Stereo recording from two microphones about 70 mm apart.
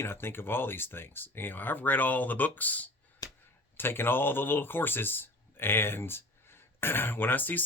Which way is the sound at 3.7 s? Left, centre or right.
Left.